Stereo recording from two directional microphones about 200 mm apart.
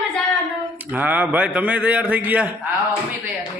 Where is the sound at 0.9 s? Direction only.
10° right (ahead or behind).